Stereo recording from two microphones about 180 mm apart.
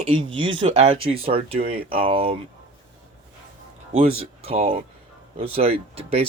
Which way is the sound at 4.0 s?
35° right (ahead or behind).